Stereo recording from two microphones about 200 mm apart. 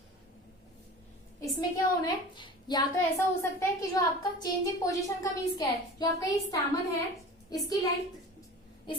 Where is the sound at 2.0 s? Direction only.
20° left (ahead or behind).